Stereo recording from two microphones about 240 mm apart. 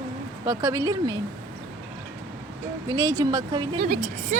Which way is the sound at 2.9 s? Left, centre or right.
Centre.